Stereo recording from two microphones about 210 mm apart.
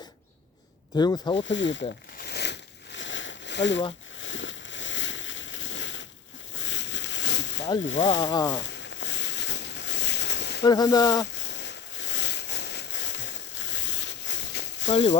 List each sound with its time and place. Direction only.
0.9 s speech: 20° left (ahead or behind)
1.5 s speech: 60° left (ahead or behind)
2.1 s a sound: 50° left (ahead or behind)
8.0 s speech: 20° left (ahead or behind)
8.7 s boat: 60° left (ahead or behind)
10.6 s speech: 20° left (ahead or behind)
11.4 s a sound: 55° left (ahead or behind)